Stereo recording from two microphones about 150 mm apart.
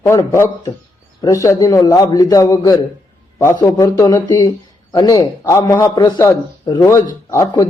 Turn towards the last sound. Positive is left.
turn(degrees=20)  # may be behind; listen again after turning